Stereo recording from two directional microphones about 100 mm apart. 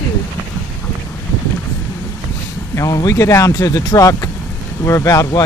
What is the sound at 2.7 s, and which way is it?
Speech, 35° left (ahead or behind).